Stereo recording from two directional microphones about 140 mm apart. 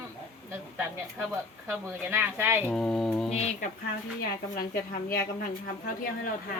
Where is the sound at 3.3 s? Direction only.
50° left (ahead or behind).